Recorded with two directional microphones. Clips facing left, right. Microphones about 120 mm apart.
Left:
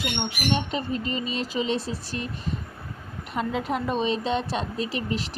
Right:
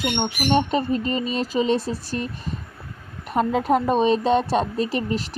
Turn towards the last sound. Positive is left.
turn(degrees=-45)  # may be behind; listen again after turning